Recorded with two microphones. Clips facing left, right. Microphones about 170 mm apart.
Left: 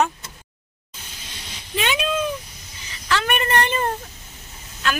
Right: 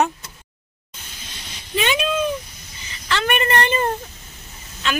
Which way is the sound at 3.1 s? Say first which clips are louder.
Right 1 dB; 5° left (ahead or behind).